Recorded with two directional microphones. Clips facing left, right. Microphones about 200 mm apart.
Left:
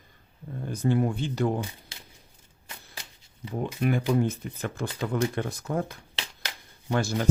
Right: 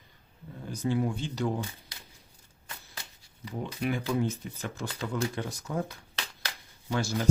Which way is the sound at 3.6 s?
50° left (ahead or behind).